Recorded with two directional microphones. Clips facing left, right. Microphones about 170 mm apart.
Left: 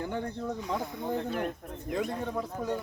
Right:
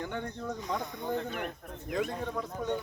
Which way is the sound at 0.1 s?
35° left (ahead or behind).